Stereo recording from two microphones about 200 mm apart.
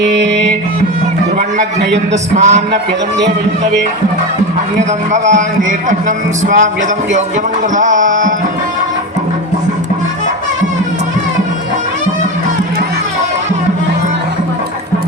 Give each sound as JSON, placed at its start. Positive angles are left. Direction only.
{"t": 2.3, "sound": "speech", "side_deg": -35}
{"t": 5.1, "sound": "speech", "side_deg": -35}
{"t": 7.8, "sound": "speech", "side_deg": -40}